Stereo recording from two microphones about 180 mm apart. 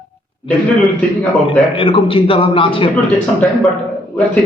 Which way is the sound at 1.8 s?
30° left (ahead or behind).